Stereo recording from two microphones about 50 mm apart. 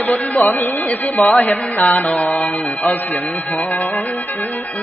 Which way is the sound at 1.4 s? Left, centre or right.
Left.